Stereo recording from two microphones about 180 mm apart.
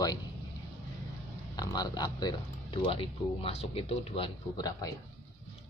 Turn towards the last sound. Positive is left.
turn(degrees=20)  # may be behind; listen again after turning